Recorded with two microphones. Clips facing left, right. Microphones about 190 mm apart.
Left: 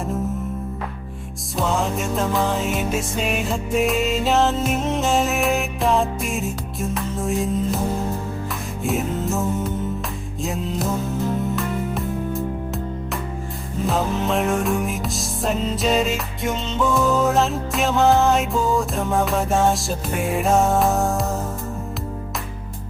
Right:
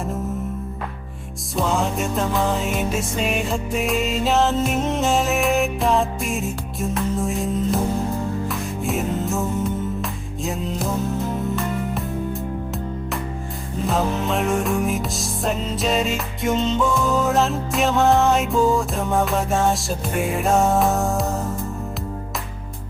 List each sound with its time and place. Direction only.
1.5 s music: centre (ahead or behind)
8.8 s music: centre (ahead or behind)
13.8 s music: centre (ahead or behind)